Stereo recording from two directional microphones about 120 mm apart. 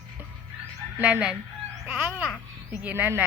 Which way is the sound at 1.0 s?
10° right (ahead or behind).